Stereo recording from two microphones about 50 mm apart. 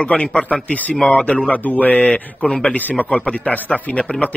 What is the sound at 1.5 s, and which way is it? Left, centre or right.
A man's voice, left.